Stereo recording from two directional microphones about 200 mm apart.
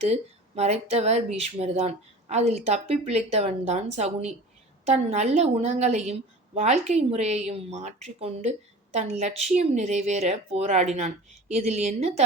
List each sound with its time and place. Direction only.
0.0 s a woman's voice: 30° right (ahead or behind)